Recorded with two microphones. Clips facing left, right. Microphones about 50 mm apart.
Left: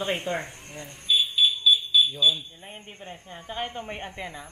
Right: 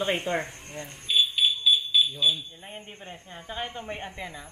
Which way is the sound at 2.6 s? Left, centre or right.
Centre.